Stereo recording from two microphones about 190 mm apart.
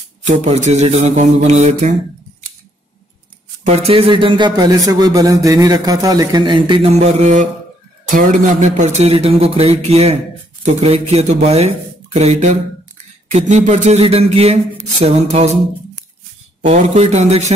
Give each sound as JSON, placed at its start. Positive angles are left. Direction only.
{"t": 0.4, "sound": "speech", "side_deg": -35}
{"t": 3.6, "sound": "a man's voice", "side_deg": -30}
{"t": 6.9, "sound": "speech", "side_deg": -35}
{"t": 16.9, "sound": "speech", "side_deg": -35}